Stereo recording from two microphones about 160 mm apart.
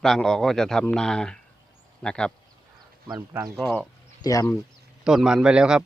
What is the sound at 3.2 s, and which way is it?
Speech, 15° right (ahead or behind).